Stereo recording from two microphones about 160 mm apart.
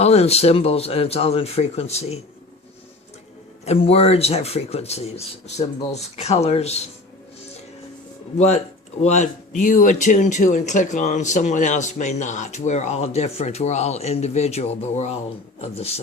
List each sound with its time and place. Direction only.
0.0 s speech: 40° left (ahead or behind)
3.7 s speech: 40° left (ahead or behind)
8.4 s speech: 45° left (ahead or behind)